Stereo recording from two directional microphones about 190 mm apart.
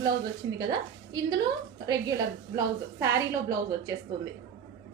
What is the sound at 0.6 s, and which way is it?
Speech, 20° right (ahead or behind).